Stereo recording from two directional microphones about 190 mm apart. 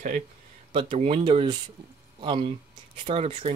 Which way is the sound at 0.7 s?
30° right (ahead or behind).